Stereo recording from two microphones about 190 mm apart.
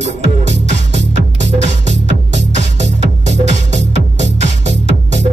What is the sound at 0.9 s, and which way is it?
Music, 40° right (ahead or behind).